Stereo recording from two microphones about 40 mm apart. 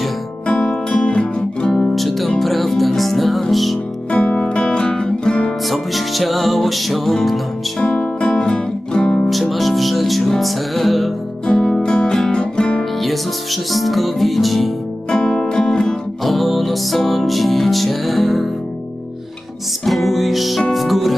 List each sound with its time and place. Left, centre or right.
0.4 s music: left
2.0 s music: centre
4.1 s music: left
5.6 s music: centre
7.8 s music: left
9.3 s music: centre
11.4 s music: centre
13.0 s music: centre
15.1 s music: centre
16.2 s music: centre
19.8 s music: centre